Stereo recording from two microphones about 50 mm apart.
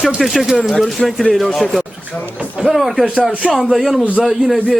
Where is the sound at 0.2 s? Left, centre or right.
Centre.